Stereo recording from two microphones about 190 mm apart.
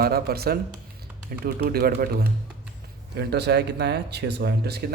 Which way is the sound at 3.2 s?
60° right (ahead or behind).